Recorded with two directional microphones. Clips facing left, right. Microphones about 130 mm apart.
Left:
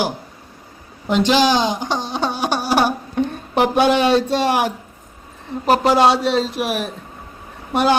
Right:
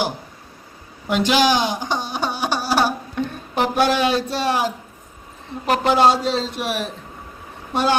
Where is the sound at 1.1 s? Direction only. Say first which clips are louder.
Left 2 dB; 10° right (ahead or behind).